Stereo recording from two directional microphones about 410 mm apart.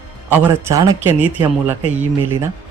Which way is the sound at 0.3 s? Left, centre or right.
Centre.